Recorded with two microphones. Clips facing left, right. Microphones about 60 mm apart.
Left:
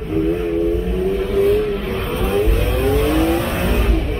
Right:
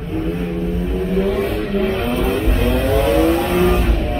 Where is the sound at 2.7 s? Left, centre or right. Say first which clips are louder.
Right 3 dB; right.